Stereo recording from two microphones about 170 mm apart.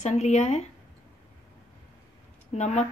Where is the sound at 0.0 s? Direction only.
40° left (ahead or behind).